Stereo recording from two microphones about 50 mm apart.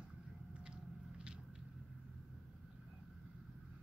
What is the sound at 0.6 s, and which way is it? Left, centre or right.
Biting, centre.